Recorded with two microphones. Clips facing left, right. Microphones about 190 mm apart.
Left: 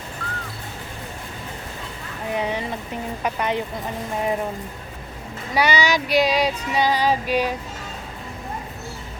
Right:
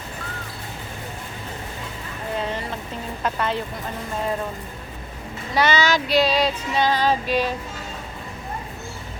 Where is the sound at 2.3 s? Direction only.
15° left (ahead or behind).